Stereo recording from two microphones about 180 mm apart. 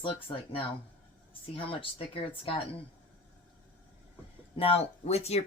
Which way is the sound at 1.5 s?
30° left (ahead or behind).